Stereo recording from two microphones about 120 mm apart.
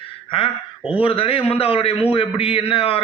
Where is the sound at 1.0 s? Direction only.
50° left (ahead or behind).